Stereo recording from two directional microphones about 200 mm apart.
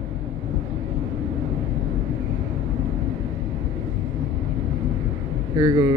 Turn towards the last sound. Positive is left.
turn(degrees=-15)  # may be behind; listen again after turning